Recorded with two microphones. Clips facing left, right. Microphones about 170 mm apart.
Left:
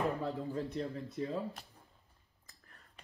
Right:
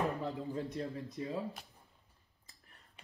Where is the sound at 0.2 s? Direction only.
15° right (ahead or behind).